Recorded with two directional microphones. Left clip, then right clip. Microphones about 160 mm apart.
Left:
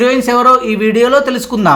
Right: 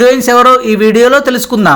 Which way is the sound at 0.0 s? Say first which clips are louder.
Right 4 dB; 50° right (ahead or behind).